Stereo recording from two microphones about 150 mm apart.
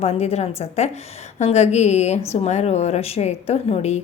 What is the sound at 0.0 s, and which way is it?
A woman's voice, 45° left (ahead or behind).